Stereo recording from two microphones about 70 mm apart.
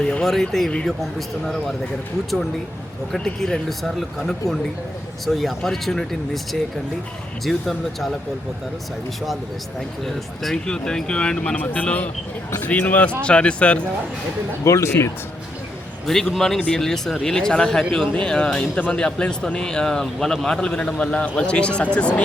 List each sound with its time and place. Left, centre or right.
0.0 s a man's voice: centre
0.5 s speech: centre
3.1 s a man's voice: centre
10.0 s a man's voice: centre
14.6 s speech: left
16.0 s a man's voice: centre